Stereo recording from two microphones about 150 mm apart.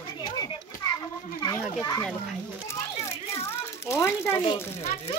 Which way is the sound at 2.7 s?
20° left (ahead or behind).